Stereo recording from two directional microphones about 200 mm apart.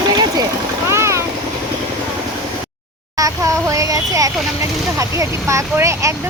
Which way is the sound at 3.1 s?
15° right (ahead or behind).